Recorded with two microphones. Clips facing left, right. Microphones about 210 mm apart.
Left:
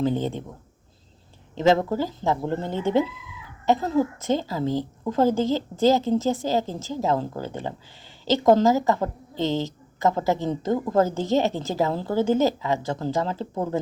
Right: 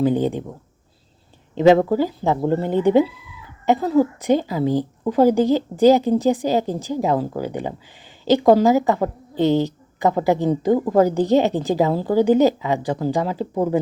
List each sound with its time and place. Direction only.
0.0 s a woman's voice: 15° right (ahead or behind)
1.5 s a woman's voice: 15° right (ahead or behind)